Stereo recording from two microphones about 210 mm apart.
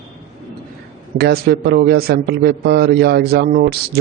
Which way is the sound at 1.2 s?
50° right (ahead or behind).